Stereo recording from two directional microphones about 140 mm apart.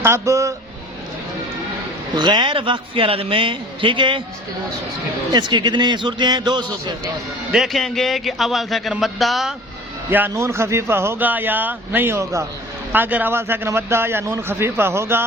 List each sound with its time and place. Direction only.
0.0 s speech: 20° right (ahead or behind)
2.1 s a man's voice: 30° right (ahead or behind)
5.3 s a man's voice: 35° right (ahead or behind)
7.5 s speech: centre (ahead or behind)
10.1 s speech: 15° right (ahead or behind)